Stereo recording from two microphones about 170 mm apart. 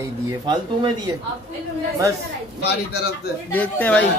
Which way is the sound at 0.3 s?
25° right (ahead or behind).